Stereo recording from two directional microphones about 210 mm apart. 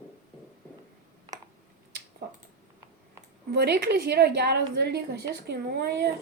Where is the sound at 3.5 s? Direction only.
50° right (ahead or behind).